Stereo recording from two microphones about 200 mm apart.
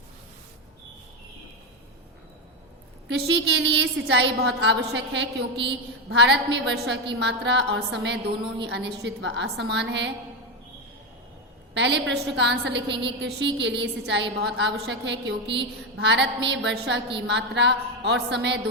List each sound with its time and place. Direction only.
3.1 s a woman's voice: 60° right (ahead or behind)
11.7 s a woman's voice: 60° right (ahead or behind)